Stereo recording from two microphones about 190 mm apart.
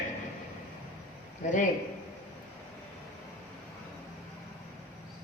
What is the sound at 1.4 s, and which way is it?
Speech, 40° left (ahead or behind).